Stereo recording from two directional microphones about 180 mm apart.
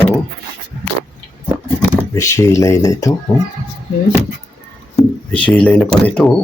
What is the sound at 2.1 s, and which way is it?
Speech, 15° left (ahead or behind).